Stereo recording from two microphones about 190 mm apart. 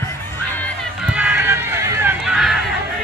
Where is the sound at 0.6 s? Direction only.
Centre (ahead or behind).